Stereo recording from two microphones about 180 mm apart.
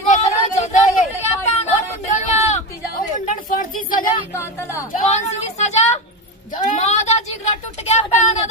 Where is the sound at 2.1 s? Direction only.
35° left (ahead or behind).